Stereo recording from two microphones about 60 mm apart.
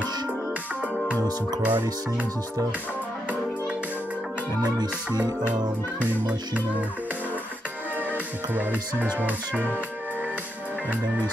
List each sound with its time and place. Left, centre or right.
1.6 s speech: right
4.6 s music: right
5.4 s speech: right